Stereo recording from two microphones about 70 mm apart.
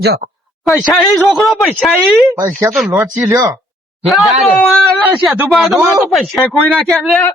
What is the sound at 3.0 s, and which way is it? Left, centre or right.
Speech, right.